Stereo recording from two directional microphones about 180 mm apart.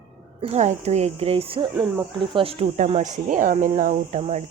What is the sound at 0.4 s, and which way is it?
Speech, 40° right (ahead or behind).